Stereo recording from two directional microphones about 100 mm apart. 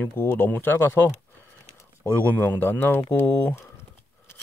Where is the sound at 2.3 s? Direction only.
15° left (ahead or behind).